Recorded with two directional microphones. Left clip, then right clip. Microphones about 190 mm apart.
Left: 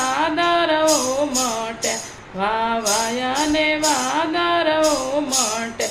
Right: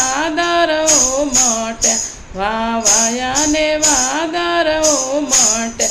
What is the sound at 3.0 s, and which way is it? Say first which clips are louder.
Music: right 4 dB; 40° right (ahead or behind).